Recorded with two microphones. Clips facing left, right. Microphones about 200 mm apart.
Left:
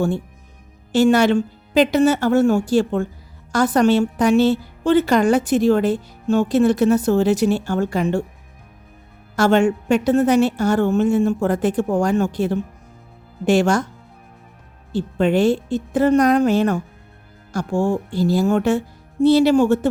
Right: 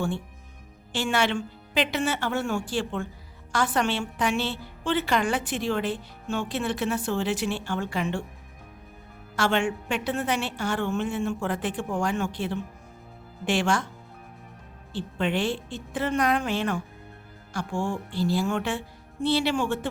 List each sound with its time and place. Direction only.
0.9 s a woman's voice: 40° left (ahead or behind)
9.3 s a woman's voice: 40° left (ahead or behind)
14.9 s a woman's voice: 40° left (ahead or behind)